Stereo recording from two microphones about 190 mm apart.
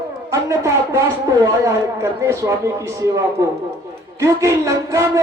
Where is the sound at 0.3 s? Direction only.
15° right (ahead or behind).